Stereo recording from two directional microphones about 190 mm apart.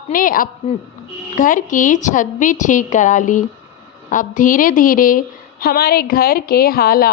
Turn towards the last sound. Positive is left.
turn(degrees=55)  # may be behind; listen again after turning